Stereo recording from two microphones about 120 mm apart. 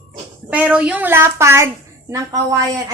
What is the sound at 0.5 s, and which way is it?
A woman's voice, 10° right (ahead or behind).